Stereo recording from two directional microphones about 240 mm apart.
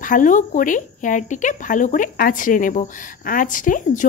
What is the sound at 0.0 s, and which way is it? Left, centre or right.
Speech, left.